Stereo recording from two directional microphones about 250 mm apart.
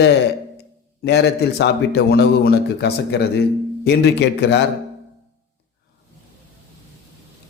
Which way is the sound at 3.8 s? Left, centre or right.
Left.